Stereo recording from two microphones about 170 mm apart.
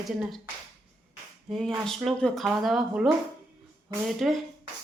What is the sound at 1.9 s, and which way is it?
Speech, centre (ahead or behind).